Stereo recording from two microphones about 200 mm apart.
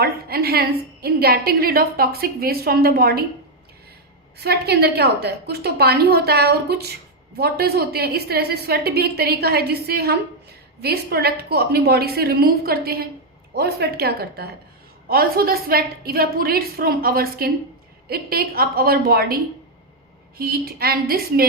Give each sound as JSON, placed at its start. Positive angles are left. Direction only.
{"t": 0.0, "sound": "a woman's voice", "side_deg": -50}
{"t": 4.4, "sound": "a woman's voice", "side_deg": -55}
{"t": 20.4, "sound": "a woman's voice", "side_deg": -50}